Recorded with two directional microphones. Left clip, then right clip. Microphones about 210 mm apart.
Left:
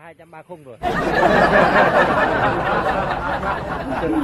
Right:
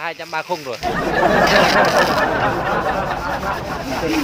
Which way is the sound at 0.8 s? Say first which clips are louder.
Left 1 dB; centre (ahead or behind).